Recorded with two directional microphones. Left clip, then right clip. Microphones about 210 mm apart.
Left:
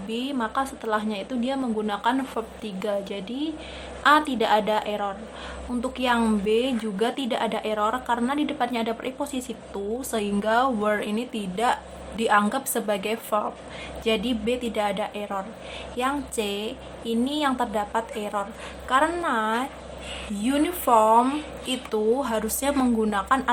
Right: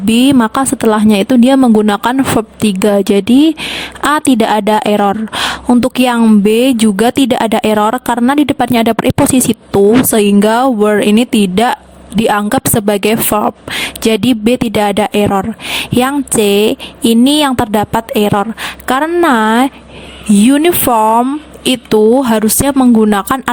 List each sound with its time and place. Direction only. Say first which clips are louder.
0.1 s speech: right 18 dB; 55° right (ahead or behind)